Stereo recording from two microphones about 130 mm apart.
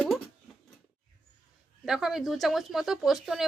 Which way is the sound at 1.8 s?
5° right (ahead or behind).